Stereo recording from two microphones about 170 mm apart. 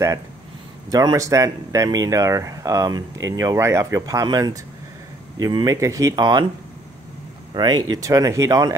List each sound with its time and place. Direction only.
0.9 s speech: 20° right (ahead or behind)
7.5 s speech: 25° right (ahead or behind)